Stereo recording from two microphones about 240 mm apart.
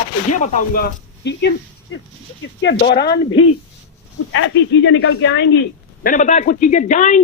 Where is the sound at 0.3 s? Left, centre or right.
Left.